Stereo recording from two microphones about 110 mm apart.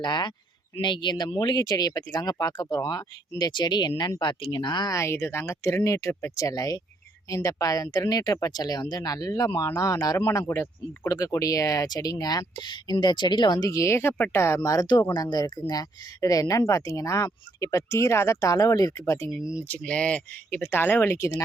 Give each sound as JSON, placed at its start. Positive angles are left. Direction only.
{"t": 0.0, "sound": "speech", "side_deg": 45}
{"t": 4.9, "sound": "speech", "side_deg": 25}
{"t": 10.4, "sound": "speech", "side_deg": 20}
{"t": 19.3, "sound": "speech", "side_deg": -5}
{"t": 19.6, "sound": "speech", "side_deg": 15}